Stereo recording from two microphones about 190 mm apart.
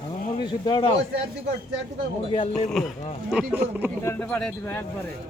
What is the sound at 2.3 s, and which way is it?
Speech, 30° left (ahead or behind).